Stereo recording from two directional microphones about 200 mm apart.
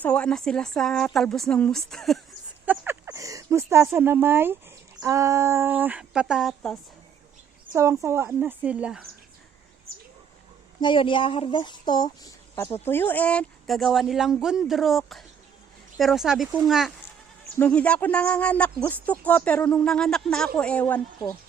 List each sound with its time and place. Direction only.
0.0 s speech: 5° left (ahead or behind)
2.6 s a sound: 10° right (ahead or behind)
4.9 s speech: 15° right (ahead or behind); by 6.7 s centre (ahead or behind)
7.7 s a woman's voice: 15° right (ahead or behind)
10.8 s speech: 25° left (ahead or behind); by 21.3 s 10° left (ahead or behind)